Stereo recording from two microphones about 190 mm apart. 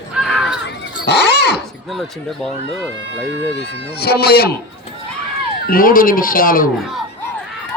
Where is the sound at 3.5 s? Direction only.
55° left (ahead or behind).